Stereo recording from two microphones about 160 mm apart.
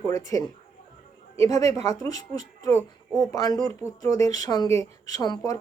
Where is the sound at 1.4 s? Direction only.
20° left (ahead or behind).